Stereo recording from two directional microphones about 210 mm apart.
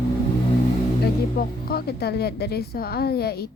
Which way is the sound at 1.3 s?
45° left (ahead or behind).